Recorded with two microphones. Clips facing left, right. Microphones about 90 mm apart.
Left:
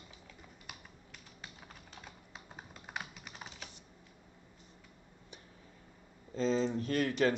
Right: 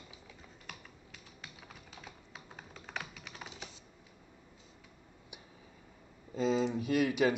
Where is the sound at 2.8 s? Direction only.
10° left (ahead or behind).